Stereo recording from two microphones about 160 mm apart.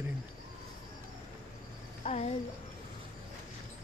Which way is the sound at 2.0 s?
40° left (ahead or behind).